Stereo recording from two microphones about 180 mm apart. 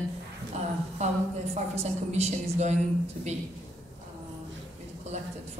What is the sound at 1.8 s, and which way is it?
Speech, 35° right (ahead or behind).